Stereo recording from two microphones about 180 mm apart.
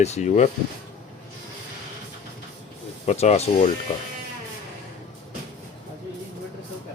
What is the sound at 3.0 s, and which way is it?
Speech, 35° left (ahead or behind).